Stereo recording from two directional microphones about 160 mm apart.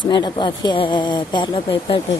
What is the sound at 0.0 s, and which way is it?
A woman's voice, 30° left (ahead or behind).